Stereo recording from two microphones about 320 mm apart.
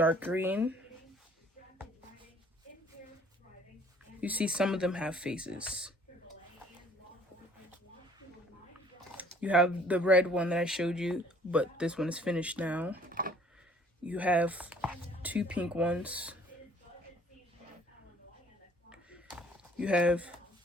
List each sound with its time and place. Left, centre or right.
0.0 s speech: centre
4.2 s speech: centre
9.1 s speech: centre
13.1 s a sound: right
14.0 s speech: centre
18.9 s a sound: centre